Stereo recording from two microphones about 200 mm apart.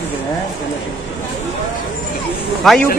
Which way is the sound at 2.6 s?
Centre (ahead or behind).